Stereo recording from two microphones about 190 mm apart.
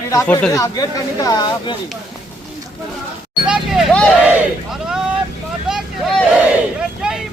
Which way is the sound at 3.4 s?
5° right (ahead or behind).